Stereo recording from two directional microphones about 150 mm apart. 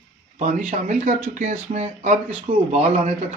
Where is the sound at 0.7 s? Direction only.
55° right (ahead or behind).